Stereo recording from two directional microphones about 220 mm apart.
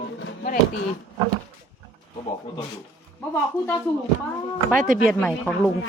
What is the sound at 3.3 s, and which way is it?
Speech, 10° left (ahead or behind).